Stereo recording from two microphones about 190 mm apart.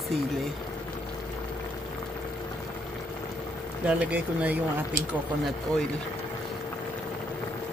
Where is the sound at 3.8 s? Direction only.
10° right (ahead or behind).